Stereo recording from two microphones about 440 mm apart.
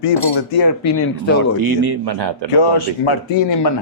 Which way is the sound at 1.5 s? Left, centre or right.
Right.